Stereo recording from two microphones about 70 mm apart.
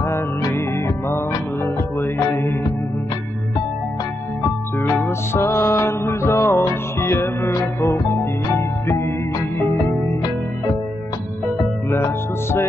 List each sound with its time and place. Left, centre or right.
0.5 s music: left
5.0 s music: left
8.5 s music: left
11.9 s music: left